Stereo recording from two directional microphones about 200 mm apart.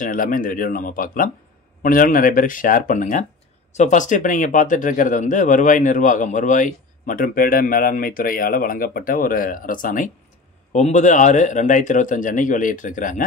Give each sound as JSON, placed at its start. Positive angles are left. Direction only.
{"t": 0.0, "sound": "speech", "side_deg": 45}